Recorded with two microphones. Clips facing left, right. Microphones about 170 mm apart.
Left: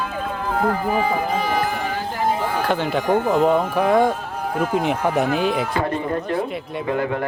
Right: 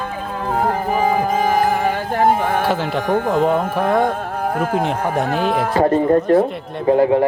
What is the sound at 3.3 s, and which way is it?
Speech, centre (ahead or behind).